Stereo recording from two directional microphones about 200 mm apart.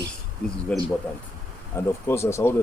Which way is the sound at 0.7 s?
5° left (ahead or behind).